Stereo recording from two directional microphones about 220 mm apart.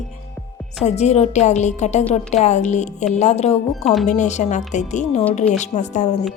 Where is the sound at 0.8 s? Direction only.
30° left (ahead or behind).